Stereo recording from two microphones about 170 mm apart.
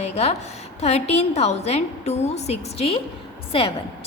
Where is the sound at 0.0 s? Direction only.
40° left (ahead or behind).